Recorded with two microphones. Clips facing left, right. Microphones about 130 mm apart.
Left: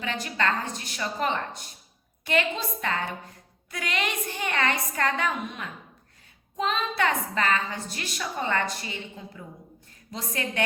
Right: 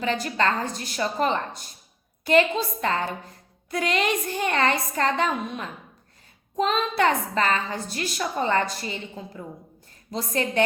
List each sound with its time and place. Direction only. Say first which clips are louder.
0.0 s a woman's voice: right 4 dB; 35° right (ahead or behind)